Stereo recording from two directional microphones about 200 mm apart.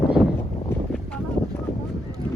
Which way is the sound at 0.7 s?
5° left (ahead or behind).